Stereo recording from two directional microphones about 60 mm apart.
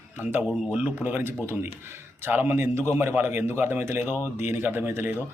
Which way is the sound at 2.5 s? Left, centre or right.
Right.